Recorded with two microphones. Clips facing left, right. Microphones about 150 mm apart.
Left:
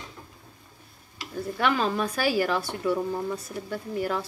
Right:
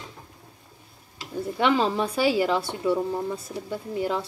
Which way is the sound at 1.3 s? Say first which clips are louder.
Right 3 dB; 25° right (ahead or behind).